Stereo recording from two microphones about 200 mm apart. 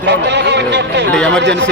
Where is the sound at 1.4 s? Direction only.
60° right (ahead or behind).